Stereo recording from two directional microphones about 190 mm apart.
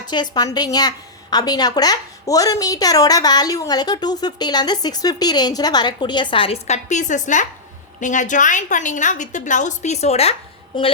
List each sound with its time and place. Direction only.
0.1 s a woman's voice: 20° left (ahead or behind)